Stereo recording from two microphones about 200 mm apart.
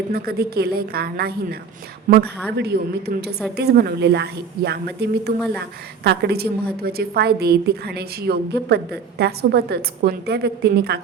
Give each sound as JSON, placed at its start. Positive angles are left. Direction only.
{"t": 0.1, "sound": "a woman's voice", "side_deg": -50}